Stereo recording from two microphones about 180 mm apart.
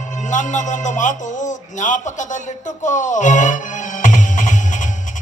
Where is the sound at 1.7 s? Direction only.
45° left (ahead or behind).